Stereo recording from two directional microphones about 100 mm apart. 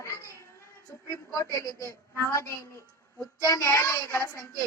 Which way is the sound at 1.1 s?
30° left (ahead or behind).